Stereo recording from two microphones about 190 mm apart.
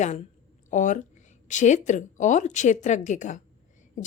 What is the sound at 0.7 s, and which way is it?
Speech, 40° left (ahead or behind).